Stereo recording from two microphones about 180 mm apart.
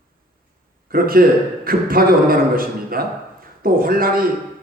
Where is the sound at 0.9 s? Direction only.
55° right (ahead or behind).